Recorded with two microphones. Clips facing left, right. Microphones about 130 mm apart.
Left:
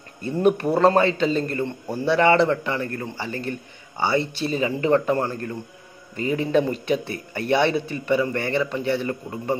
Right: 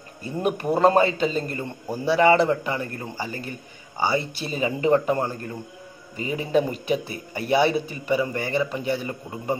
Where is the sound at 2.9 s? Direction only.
20° right (ahead or behind).